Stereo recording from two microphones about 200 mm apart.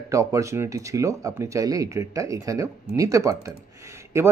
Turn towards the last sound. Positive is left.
turn(degrees=-15)  # may be behind; listen again after turning